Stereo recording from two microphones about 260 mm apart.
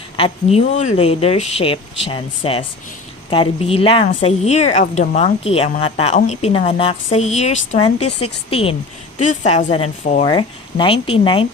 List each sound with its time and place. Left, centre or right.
0.2 s a woman's voice: left
7.9 s a woman's voice: left
8.4 s a woman's voice: left